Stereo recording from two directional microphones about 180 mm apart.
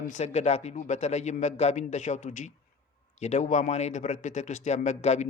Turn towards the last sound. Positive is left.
turn(degrees=40)  # may be behind; listen again after turning